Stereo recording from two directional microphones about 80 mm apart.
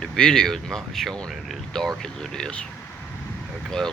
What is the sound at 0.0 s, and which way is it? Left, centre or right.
Speech, centre.